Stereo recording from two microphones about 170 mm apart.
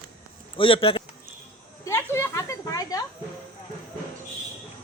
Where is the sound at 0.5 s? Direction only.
30° left (ahead or behind).